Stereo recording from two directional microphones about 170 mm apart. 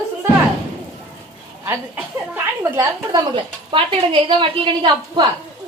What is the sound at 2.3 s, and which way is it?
A woman's voice, 20° right (ahead or behind).